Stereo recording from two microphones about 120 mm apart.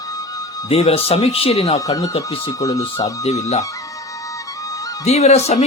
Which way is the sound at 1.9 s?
30° left (ahead or behind).